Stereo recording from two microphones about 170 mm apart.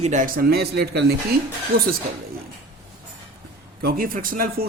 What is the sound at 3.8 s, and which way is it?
Speech, 60° right (ahead or behind).